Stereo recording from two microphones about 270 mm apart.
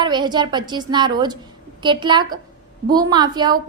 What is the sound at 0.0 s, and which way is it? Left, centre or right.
A woman's voice, centre.